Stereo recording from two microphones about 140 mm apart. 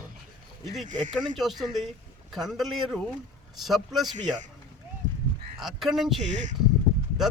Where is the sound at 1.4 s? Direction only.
Centre (ahead or behind).